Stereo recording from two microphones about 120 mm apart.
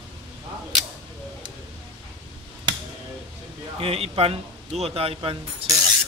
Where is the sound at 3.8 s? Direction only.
55° right (ahead or behind).